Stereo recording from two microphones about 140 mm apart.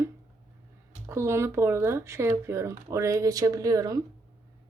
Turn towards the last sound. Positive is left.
turn(degrees=-25)  # may be behind; listen again after turning